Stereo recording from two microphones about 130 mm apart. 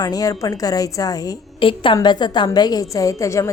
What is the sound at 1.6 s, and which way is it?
A woman's voice, 40° left (ahead or behind).